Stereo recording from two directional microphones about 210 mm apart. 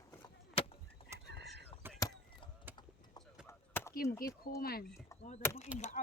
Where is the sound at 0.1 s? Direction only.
20° left (ahead or behind).